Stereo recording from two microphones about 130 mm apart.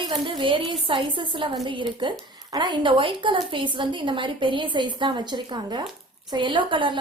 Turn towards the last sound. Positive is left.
turn(degrees=-40)  # may be behind; listen again after turning